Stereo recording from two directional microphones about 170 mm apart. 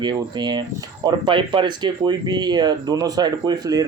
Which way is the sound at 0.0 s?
25° right (ahead or behind).